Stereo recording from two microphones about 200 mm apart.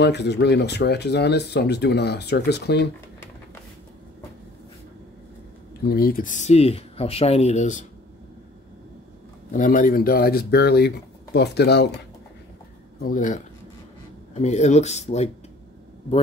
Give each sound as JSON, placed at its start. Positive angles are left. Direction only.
{"t": 0.0, "sound": "speech", "side_deg": 55}
{"t": 5.9, "sound": "speech", "side_deg": 50}
{"t": 9.5, "sound": "speech", "side_deg": 45}
{"t": 13.0, "sound": "speech", "side_deg": 40}